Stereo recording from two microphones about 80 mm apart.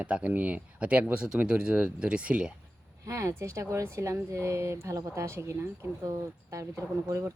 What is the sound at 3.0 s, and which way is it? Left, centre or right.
Speech, right.